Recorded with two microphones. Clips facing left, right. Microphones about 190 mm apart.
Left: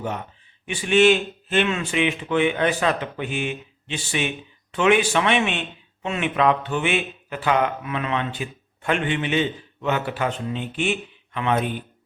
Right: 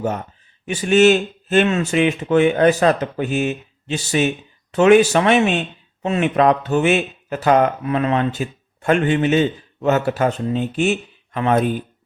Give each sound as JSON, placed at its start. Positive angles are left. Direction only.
{"t": 0.0, "sound": "speech", "side_deg": -45}